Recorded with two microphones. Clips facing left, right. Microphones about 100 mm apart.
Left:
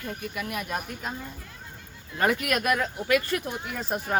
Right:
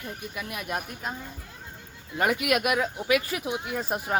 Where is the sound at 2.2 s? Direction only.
10° right (ahead or behind).